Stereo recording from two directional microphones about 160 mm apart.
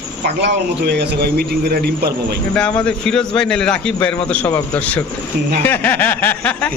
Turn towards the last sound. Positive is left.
turn(degrees=10)  # may be behind; listen again after turning